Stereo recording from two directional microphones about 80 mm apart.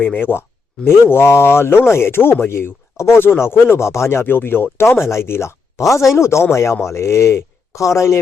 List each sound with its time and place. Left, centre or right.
0.0 s speech: left